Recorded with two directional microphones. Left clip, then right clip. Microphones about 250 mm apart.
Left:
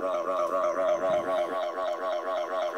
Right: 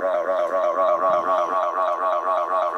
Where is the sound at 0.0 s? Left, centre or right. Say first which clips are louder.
Right 6 dB; centre.